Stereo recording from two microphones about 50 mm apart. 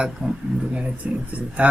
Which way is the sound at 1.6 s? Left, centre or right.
Right.